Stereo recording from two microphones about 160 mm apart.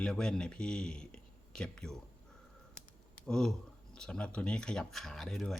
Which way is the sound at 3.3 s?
5° left (ahead or behind).